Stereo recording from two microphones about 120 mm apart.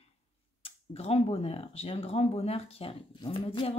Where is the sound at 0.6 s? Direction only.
55° left (ahead or behind).